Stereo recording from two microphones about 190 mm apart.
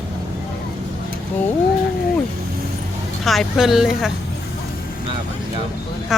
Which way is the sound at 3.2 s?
Centre (ahead or behind).